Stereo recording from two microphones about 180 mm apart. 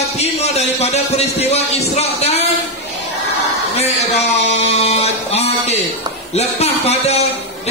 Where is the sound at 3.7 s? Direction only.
35° left (ahead or behind).